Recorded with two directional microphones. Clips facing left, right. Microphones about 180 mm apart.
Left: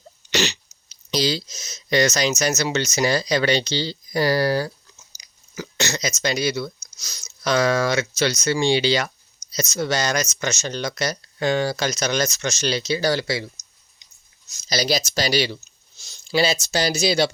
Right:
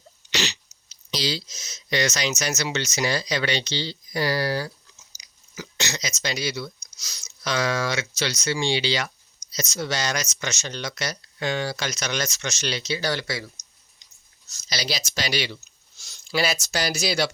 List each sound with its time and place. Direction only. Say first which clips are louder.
0.3 s speech: left 6 dB; 50° left (ahead or behind); by 13.5 s 30° left (ahead or behind)
14.7 s speech: left 8 dB; 40° left (ahead or behind)
16.0 s speech: left 4 dB; 25° left (ahead or behind)